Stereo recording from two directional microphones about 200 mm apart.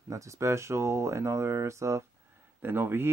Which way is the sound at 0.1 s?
15° right (ahead or behind).